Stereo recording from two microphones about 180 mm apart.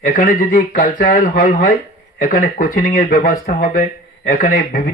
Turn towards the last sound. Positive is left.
turn(degrees=50)  # may be behind; listen again after turning